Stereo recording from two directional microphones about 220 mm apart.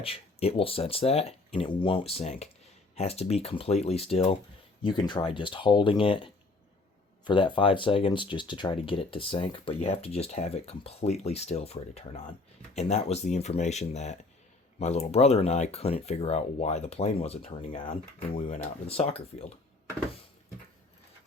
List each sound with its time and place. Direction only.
0.0 s speech: 25° left (ahead or behind)